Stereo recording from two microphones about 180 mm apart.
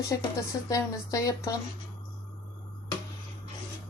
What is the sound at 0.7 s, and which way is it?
Speech, 20° left (ahead or behind).